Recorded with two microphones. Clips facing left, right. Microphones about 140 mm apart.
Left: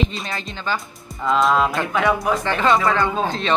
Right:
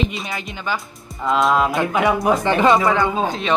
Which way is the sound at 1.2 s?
Centre (ahead or behind).